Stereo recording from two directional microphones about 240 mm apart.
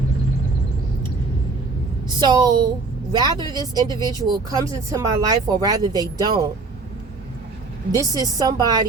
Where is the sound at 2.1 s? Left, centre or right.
Centre.